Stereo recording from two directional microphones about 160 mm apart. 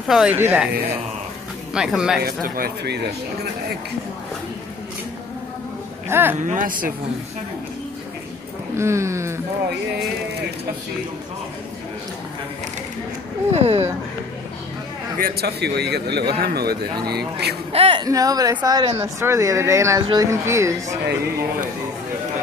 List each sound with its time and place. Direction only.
0.1 s speech: 10° right (ahead or behind)
1.7 s speech: 5° right (ahead or behind)
2.4 s a man's voice: 65° right (ahead or behind); by 3.1 s 90° right
6.0 s speech: 15° right (ahead or behind)
6.4 s speech: 55° right (ahead or behind)
8.7 s speech: 15° right (ahead or behind)
13.5 s speech: 40° right (ahead or behind)
15.1 s a man's voice: 75° right (ahead or behind); by 17.6 s 90° right
17.7 s speech: 40° right (ahead or behind)
18.0 s speech: 20° right (ahead or behind)